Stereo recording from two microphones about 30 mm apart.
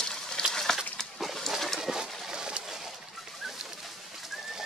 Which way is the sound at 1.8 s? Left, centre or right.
Centre.